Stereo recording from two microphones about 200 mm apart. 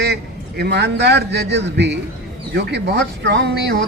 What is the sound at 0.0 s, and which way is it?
A man's voice, 55° right (ahead or behind).